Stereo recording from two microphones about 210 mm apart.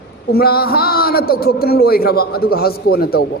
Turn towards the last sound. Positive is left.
turn(degrees=45)  # may be behind; listen again after turning